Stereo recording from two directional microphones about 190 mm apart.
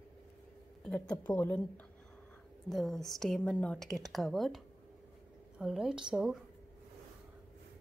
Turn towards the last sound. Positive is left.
turn(degrees=-5)  # may be behind; listen again after turning